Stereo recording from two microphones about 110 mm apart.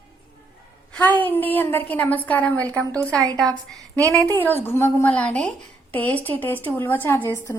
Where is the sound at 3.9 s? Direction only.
30° right (ahead or behind).